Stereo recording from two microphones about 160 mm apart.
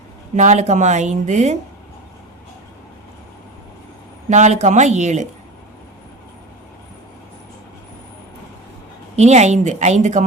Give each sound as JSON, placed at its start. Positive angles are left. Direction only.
{"t": 0.3, "sound": "speech", "side_deg": -45}
{"t": 4.3, "sound": "speech", "side_deg": -45}
{"t": 9.1, "sound": "speech", "side_deg": -45}